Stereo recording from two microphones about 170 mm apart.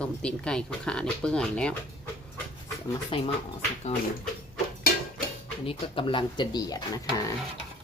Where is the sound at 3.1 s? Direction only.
30° left (ahead or behind).